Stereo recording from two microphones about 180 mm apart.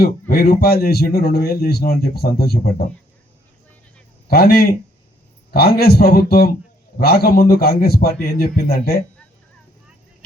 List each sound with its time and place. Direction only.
0.0 s speech: 60° left (ahead or behind)
4.3 s speech: 60° left (ahead or behind)